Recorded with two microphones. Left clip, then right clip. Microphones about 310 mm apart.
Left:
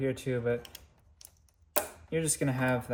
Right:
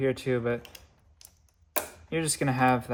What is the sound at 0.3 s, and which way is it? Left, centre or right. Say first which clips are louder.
Speech: right 3 dB; right.